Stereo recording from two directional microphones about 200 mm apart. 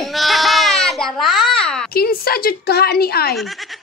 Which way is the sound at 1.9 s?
50° left (ahead or behind).